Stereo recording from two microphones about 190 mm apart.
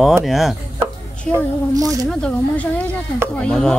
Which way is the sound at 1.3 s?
15° right (ahead or behind).